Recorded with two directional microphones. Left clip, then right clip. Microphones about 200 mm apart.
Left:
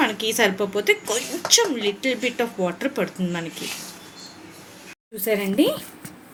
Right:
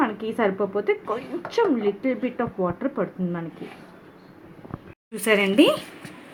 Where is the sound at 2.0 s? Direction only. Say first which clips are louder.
Left 3 dB; 10° right (ahead or behind).